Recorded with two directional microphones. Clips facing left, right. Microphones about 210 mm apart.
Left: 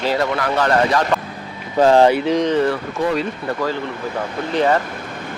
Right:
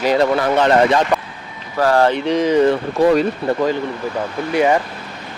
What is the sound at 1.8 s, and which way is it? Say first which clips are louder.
Speech: left 3 dB; 20° left (ahead or behind).